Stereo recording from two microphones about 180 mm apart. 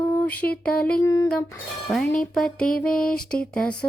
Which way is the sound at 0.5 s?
5° left (ahead or behind).